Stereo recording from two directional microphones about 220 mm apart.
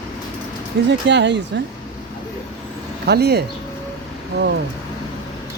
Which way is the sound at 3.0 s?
45° right (ahead or behind).